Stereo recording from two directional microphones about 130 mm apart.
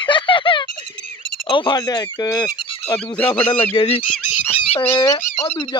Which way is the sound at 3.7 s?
45° left (ahead or behind).